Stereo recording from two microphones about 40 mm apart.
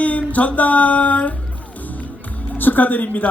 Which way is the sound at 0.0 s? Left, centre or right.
Left.